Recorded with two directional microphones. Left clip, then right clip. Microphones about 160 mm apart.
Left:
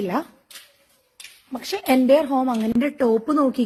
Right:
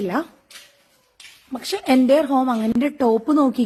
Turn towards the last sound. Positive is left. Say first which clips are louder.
# right 2 dB
turn(degrees=-20)  # may be behind; listen again after turning